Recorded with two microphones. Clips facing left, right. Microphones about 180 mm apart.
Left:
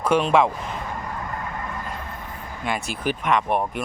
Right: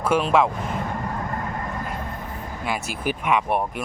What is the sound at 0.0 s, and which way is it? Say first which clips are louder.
Speech: left 1 dB; 5° right (ahead or behind).